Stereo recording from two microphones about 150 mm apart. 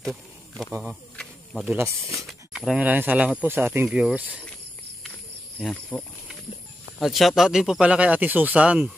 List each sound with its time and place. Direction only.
0.0 s a sound: centre (ahead or behind)
1.1 s insect: 5° left (ahead or behind)
1.7 s speech: 20° right (ahead or behind)
2.2 s speech: centre (ahead or behind)
5.6 s speech: 5° left (ahead or behind)